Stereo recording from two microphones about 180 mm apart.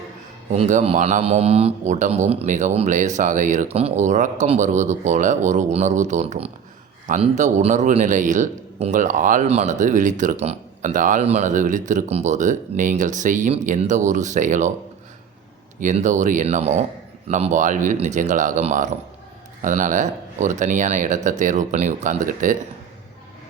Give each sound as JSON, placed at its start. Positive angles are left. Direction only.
{"t": 0.5, "sound": "a man's voice", "side_deg": -40}
{"t": 15.8, "sound": "a man's voice", "side_deg": -45}